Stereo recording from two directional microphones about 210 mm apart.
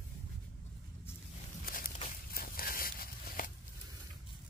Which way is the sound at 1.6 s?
40° left (ahead or behind).